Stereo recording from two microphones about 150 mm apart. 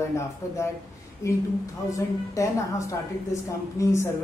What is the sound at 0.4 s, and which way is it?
A woman's voice, 20° left (ahead or behind).